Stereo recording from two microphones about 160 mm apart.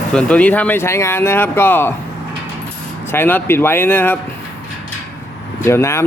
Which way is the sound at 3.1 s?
15° left (ahead or behind).